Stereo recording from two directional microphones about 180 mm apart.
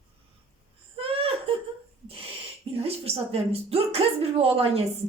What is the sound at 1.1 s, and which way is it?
Laughter, 30° right (ahead or behind).